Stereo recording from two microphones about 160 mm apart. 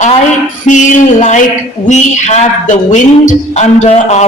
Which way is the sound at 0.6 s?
50° left (ahead or behind).